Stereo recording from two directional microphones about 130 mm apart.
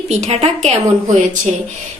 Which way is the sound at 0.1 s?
55° right (ahead or behind).